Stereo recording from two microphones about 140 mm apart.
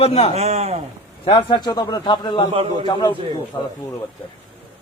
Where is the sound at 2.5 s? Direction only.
40° right (ahead or behind).